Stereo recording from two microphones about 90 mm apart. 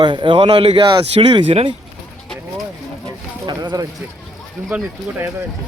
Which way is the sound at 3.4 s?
50° right (ahead or behind).